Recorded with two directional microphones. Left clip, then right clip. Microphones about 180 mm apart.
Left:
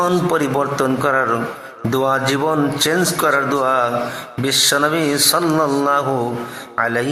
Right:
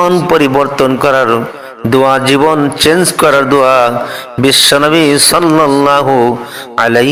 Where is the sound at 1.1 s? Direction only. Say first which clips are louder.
Right 8 dB; 30° right (ahead or behind).